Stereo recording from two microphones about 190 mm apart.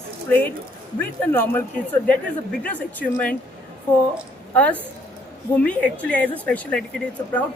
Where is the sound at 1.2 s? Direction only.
10° left (ahead or behind).